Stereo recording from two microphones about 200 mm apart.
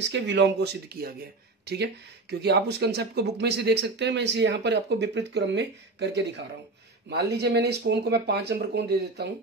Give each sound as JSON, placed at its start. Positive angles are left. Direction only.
{"t": 0.0, "sound": "speech", "side_deg": -60}